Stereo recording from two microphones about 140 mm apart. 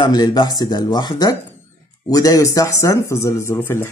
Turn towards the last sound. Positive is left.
turn(degrees=15)  # may be behind; listen again after turning